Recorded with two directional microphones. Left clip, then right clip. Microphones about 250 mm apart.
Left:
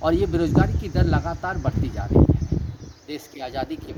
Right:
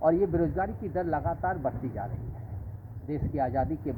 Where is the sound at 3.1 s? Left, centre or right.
Left.